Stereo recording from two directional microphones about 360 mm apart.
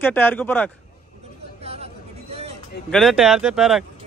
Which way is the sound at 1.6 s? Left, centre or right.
Centre.